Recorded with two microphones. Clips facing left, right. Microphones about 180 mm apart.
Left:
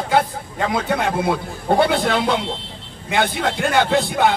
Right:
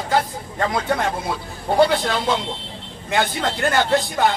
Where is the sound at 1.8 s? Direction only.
60° left (ahead or behind).